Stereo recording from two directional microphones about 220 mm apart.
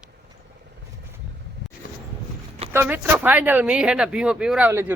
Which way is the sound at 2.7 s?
10° right (ahead or behind).